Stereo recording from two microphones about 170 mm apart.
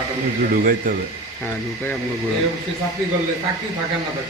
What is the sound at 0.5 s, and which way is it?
Speech, 55° right (ahead or behind).